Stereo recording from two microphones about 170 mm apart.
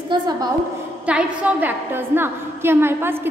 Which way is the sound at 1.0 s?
5° right (ahead or behind).